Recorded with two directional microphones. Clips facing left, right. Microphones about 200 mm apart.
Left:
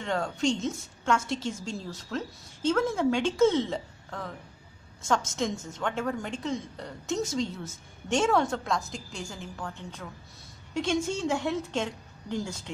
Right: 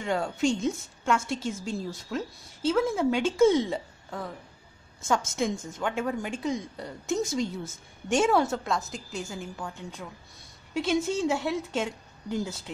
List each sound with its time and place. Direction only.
0.0 s a woman's voice: 10° right (ahead or behind)